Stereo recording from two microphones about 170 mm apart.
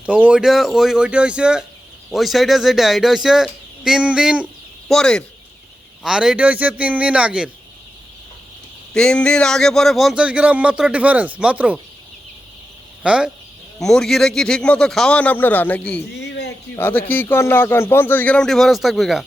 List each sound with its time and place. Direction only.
0.0 s speech: 10° right (ahead or behind)
8.9 s speech: 5° left (ahead or behind)
13.0 s speech: 5° right (ahead or behind)
16.1 s a sound: 90° left
16.7 s speech: 10° left (ahead or behind)